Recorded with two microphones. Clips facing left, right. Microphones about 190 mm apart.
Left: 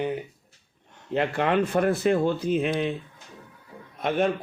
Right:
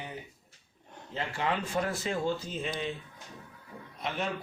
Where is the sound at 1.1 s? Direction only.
65° left (ahead or behind).